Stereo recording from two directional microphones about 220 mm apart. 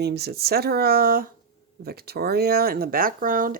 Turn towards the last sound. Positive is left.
turn(degrees=-40)  # may be behind; listen again after turning